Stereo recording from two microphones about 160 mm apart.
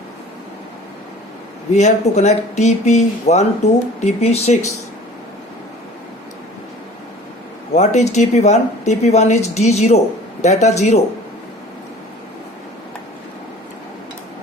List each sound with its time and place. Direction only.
1.7 s speech: 45° left (ahead or behind)
7.7 s speech: 45° left (ahead or behind)